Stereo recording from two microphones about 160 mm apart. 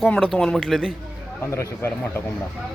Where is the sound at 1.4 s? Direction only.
15° left (ahead or behind).